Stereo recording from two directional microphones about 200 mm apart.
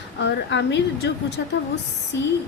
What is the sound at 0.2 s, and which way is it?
A woman's voice, 60° left (ahead or behind).